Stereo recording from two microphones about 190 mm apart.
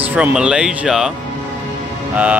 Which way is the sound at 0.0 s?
5° right (ahead or behind).